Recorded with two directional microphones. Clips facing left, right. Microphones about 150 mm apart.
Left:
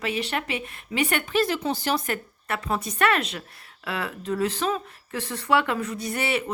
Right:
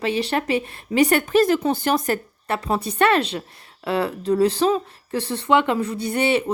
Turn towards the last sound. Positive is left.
turn(degrees=-25)  # may be behind; listen again after turning